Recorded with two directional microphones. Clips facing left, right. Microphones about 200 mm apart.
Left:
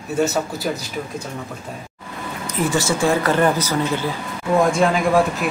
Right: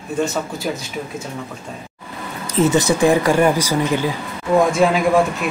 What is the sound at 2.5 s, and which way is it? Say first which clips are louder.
Speech: right 5 dB; 20° right (ahead or behind).